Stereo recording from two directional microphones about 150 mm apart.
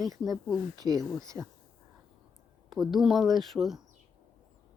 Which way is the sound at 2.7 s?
Centre (ahead or behind).